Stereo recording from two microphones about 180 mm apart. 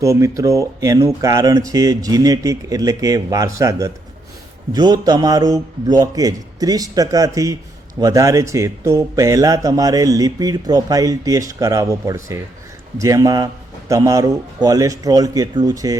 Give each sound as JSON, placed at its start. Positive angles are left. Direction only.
{"t": 0.0, "sound": "speech", "side_deg": -15}